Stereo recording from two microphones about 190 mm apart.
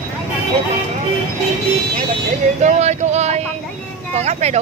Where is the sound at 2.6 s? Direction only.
35° right (ahead or behind).